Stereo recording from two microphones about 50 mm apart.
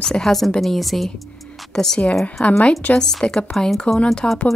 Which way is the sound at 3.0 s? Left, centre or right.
Centre.